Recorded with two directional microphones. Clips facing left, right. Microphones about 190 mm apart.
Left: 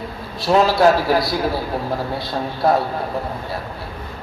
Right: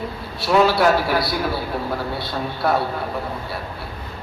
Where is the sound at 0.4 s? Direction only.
40° left (ahead or behind).